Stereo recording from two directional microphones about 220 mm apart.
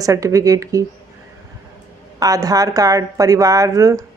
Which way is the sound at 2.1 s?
15° right (ahead or behind).